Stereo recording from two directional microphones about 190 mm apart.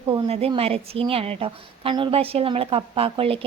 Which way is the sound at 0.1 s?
30° right (ahead or behind).